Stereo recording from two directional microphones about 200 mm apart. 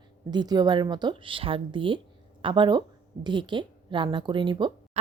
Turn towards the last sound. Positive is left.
turn(degrees=-25)  # may be behind; listen again after turning